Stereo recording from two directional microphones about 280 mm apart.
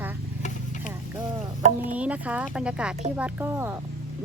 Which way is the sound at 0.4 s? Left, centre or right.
Left.